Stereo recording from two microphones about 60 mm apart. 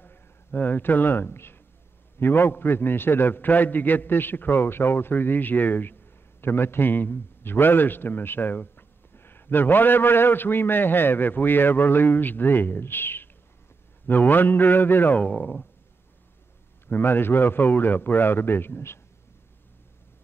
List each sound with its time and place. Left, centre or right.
0.0 s a man's voice: left
15.1 s speech: left
16.8 s a man's voice: left